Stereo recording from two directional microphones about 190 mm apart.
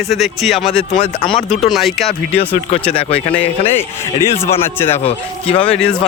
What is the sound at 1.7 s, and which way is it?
Speech, centre (ahead or behind).